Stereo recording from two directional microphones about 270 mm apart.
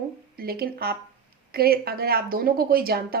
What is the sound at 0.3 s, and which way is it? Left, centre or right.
A woman's voice, right.